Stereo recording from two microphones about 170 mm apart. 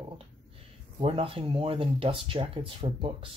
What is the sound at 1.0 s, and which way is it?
Speech, 35° right (ahead or behind).